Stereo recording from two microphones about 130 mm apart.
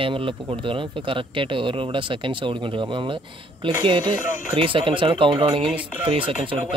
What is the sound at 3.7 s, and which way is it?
Speech, 40° right (ahead or behind).